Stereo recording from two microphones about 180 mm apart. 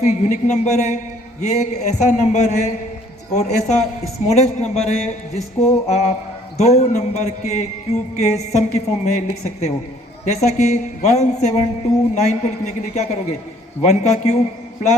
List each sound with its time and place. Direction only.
0.0 s a man's voice: 40° left (ahead or behind)